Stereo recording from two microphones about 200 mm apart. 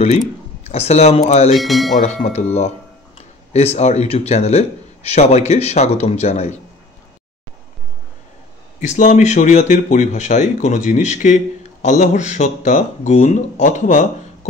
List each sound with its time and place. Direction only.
0.7 s speech: 30° left (ahead or behind)
1.6 s speech: centre (ahead or behind)
2.0 s speech: 35° left (ahead or behind)
3.5 s speech: 35° left (ahead or behind)
8.8 s speech: 35° left (ahead or behind)